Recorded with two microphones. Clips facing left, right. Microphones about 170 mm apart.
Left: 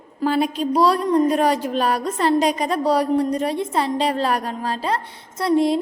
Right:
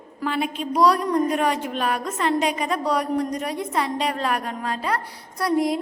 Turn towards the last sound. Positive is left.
turn(degrees=25)  # may be behind; listen again after turning